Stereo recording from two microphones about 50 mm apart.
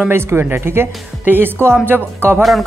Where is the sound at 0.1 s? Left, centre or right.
Right.